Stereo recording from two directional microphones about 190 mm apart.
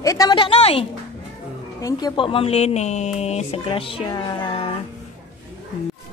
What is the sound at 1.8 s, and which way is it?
Music, 20° left (ahead or behind).